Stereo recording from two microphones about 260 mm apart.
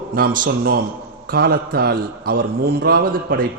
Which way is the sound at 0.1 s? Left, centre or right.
Right.